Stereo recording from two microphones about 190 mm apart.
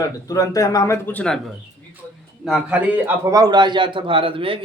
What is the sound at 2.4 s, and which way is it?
A man's voice, 5° right (ahead or behind).